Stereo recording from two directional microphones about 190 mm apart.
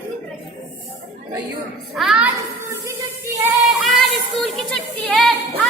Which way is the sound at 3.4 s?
Centre (ahead or behind).